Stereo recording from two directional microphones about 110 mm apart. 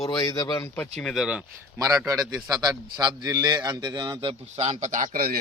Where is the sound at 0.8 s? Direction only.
10° left (ahead or behind).